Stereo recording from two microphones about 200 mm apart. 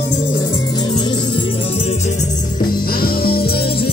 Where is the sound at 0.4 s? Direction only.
20° left (ahead or behind).